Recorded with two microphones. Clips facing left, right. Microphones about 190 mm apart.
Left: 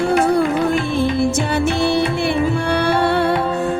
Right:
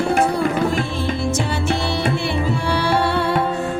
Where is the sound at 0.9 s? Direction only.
55° left (ahead or behind).